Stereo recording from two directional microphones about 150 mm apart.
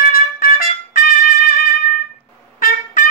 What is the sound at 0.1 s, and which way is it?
Trumpet, 70° left (ahead or behind).